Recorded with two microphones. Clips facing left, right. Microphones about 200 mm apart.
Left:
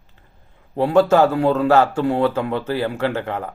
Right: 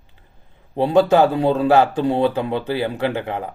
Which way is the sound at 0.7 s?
20° right (ahead or behind).